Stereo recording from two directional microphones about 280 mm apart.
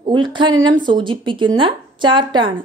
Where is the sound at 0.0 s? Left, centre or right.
Centre.